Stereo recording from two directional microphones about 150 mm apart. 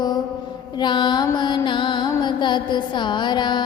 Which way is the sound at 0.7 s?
30° left (ahead or behind).